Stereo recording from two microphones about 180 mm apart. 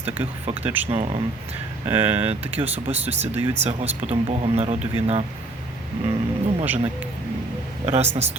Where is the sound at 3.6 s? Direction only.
35° right (ahead or behind).